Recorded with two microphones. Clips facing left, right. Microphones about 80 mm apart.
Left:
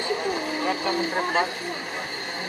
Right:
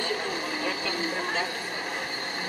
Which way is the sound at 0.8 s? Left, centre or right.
Left.